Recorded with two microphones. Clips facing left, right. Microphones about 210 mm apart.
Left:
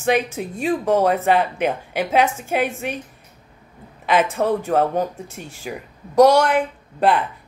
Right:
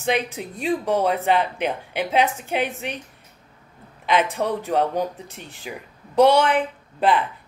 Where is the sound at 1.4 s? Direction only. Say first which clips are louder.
Left 3 dB; 50° left (ahead or behind).